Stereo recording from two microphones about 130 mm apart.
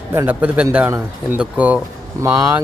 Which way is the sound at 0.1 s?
15° right (ahead or behind).